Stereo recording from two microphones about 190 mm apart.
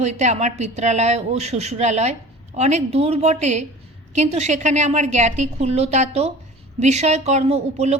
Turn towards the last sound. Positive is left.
turn(degrees=-35)  # may be behind; listen again after turning